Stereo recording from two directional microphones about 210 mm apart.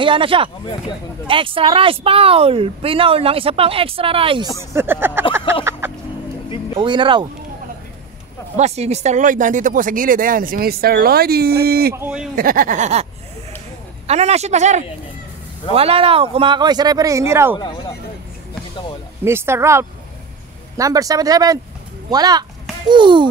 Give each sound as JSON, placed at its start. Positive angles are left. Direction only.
{"t": 0.0, "sound": "speech", "side_deg": -25}
{"t": 4.7, "sound": "speech", "side_deg": -10}
{"t": 5.5, "sound": "vehicle", "side_deg": -10}
{"t": 6.8, "sound": "speech", "side_deg": -25}
{"t": 8.5, "sound": "speech", "side_deg": -30}
{"t": 11.9, "sound": "speech", "side_deg": -5}
{"t": 12.4, "sound": "speech", "side_deg": -40}
{"t": 14.0, "sound": "speech", "side_deg": -30}
{"t": 19.2, "sound": "speech", "side_deg": -10}